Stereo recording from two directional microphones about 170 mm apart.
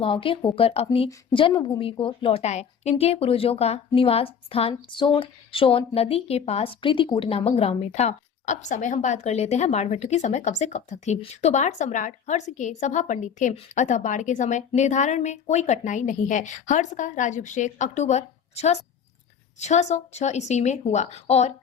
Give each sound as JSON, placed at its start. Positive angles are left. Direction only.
{"t": 0.0, "sound": "a woman's voice", "side_deg": 30}